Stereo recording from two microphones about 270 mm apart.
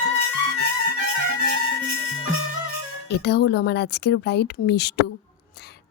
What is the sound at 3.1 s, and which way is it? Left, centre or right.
Speech, left.